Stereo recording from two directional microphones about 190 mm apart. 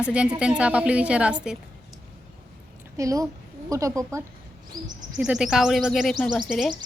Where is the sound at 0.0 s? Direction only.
5° right (ahead or behind).